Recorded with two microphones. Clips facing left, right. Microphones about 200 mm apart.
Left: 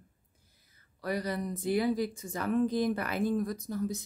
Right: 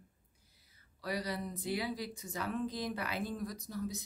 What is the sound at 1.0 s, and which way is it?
A woman's voice, 50° left (ahead or behind).